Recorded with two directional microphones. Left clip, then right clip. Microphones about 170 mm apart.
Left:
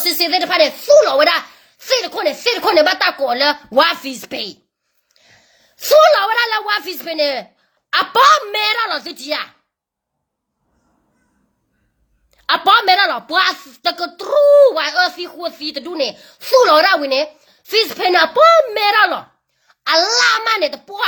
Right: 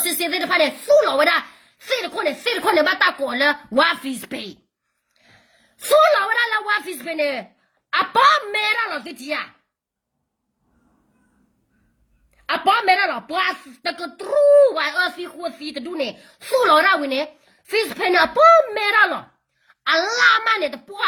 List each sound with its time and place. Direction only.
0.0 s a woman's voice: 15° right (ahead or behind)
12.3 s a woman's voice: 10° right (ahead or behind)
14.8 s a woman's voice: 15° right (ahead or behind)